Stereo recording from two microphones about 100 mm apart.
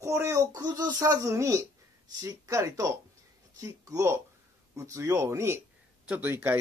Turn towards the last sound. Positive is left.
turn(degrees=-20)  # may be behind; listen again after turning